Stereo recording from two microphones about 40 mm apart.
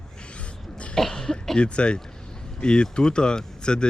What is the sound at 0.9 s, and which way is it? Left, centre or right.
Cough, centre.